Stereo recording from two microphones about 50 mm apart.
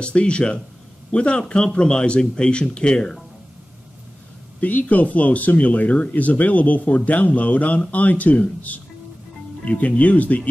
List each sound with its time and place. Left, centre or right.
0.0 s speech: left
4.6 s speech: left